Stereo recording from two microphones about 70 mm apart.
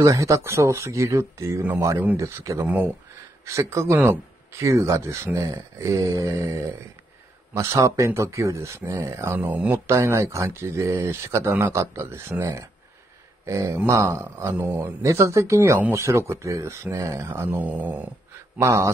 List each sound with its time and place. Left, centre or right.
0.0 s speech: right
2.6 s dog: right
3.4 s speech: right
9.3 s dog: right
9.8 s speech: right
13.5 s speech: right
14.6 s dog: right
15.0 s speech: right
17.3 s speech: right
17.6 s dog: right
18.6 s speech: right